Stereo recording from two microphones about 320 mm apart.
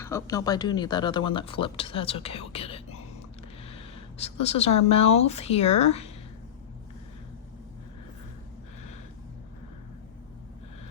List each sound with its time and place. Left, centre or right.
0.0 s speech: centre